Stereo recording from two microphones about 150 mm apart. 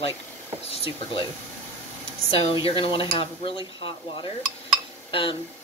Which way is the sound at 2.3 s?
40° left (ahead or behind).